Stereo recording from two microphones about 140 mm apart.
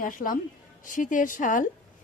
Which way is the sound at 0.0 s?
75° left (ahead or behind).